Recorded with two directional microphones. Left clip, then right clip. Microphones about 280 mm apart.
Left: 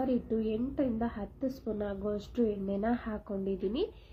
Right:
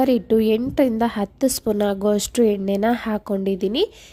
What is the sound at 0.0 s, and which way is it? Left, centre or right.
Speech, right.